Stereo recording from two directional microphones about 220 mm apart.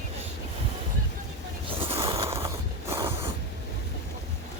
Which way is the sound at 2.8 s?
10° right (ahead or behind).